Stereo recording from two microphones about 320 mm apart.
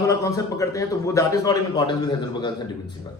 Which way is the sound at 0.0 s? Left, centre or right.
Centre.